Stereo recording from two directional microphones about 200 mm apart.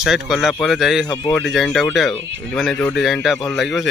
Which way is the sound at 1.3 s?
Centre (ahead or behind).